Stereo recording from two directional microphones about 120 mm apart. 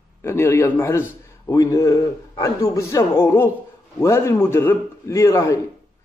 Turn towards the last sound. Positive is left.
turn(degrees=25)  # may be behind; listen again after turning